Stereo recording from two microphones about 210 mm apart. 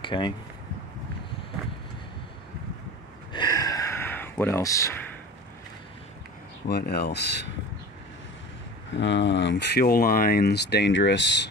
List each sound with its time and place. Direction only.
0.0 s speech: 25° left (ahead or behind)
3.3 s a sound: 15° left (ahead or behind)
6.7 s speech: 50° left (ahead or behind)
8.9 s speech: 60° left (ahead or behind)